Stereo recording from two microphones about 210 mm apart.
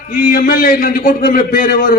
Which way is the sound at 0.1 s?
40° left (ahead or behind).